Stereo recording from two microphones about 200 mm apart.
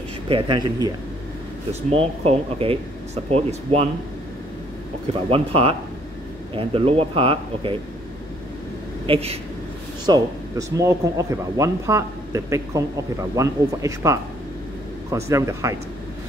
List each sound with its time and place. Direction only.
0.3 s speech: 20° right (ahead or behind)
2.0 s speech: 30° right (ahead or behind)
5.3 s speech: 25° right (ahead or behind)
9.0 s speech: 30° right (ahead or behind)
10.0 s speech: 15° right (ahead or behind)